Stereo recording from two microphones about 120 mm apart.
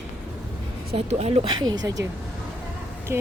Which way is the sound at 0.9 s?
60° right (ahead or behind).